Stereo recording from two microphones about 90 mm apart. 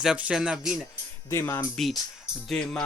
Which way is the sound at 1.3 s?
30° left (ahead or behind).